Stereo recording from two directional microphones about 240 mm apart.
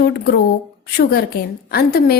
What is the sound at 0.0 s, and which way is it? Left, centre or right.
Speech, left.